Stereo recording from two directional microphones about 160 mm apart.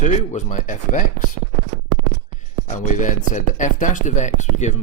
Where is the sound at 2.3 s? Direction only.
50° left (ahead or behind).